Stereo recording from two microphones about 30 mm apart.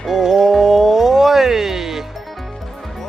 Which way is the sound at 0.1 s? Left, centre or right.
Centre.